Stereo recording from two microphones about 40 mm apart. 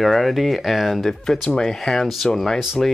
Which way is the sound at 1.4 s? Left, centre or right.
Centre.